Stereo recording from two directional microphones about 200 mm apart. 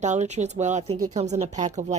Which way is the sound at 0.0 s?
35° right (ahead or behind).